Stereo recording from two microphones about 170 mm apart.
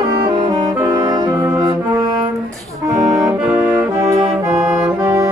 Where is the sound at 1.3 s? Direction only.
15° right (ahead or behind).